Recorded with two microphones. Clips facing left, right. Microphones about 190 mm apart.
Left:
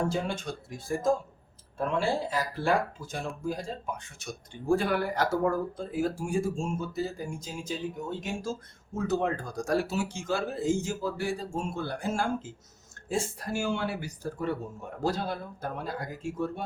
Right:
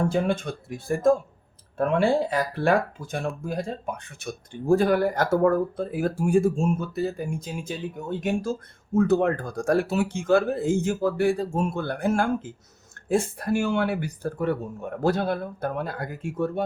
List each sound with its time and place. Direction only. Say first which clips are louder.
0.1 s speech: right 7 dB; 60° right (ahead or behind)
4.7 s speech: right 6 dB; 40° right (ahead or behind); by 16.6 s 60° right (ahead or behind)